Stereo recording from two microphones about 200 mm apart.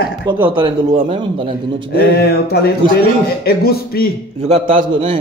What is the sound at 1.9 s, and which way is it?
A man's voice, 55° left (ahead or behind).